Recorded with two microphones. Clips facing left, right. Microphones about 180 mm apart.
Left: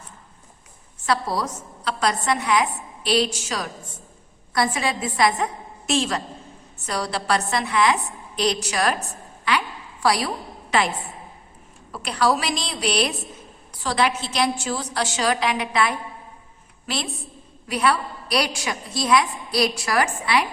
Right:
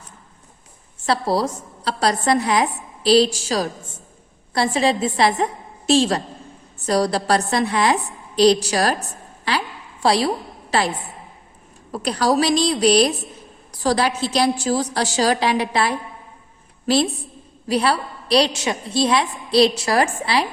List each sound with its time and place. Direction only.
1.0 s a woman's voice: 30° right (ahead or behind)
9.4 s a sound: 35° right (ahead or behind)
11.9 s a woman's voice: 40° right (ahead or behind)